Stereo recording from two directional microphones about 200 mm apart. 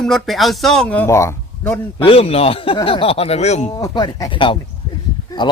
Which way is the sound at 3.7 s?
20° left (ahead or behind).